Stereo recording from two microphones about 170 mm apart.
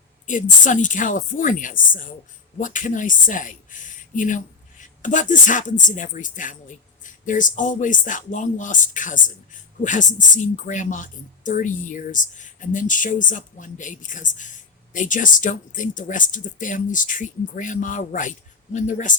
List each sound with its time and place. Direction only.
0.6 s speech: 50° left (ahead or behind)